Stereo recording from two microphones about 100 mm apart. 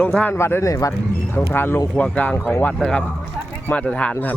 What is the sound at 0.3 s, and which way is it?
Speech, 25° left (ahead or behind).